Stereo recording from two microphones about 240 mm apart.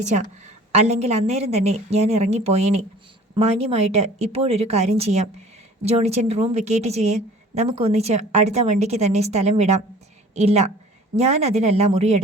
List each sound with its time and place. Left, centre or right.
0.7 s a woman's voice: right